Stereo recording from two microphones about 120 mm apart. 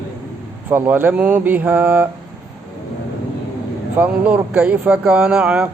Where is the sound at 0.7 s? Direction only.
15° right (ahead or behind).